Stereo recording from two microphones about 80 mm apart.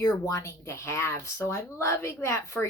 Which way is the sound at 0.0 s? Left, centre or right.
Left.